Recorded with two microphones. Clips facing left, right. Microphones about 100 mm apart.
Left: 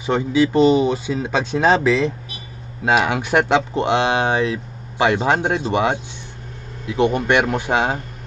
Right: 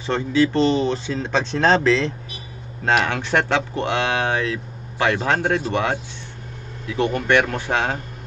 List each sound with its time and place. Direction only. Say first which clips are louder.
0.0 s speech: left 2 dB; 15° left (ahead or behind)